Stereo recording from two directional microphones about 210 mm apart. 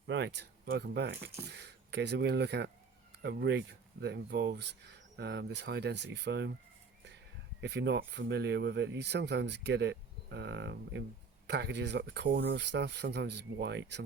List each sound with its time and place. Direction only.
0.1 s speech: 55° right (ahead or behind)
7.6 s speech: 55° right (ahead or behind)